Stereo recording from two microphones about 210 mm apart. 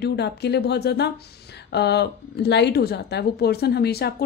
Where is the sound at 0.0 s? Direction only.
50° left (ahead or behind).